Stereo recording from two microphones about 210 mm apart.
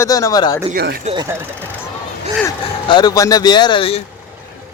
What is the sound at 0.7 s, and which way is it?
Speech, 50° right (ahead or behind).